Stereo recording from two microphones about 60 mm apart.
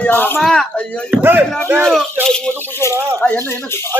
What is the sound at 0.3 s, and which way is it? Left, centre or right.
Speech, centre.